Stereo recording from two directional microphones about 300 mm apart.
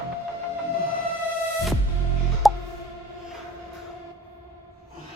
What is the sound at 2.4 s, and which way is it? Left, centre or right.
Plop, centre.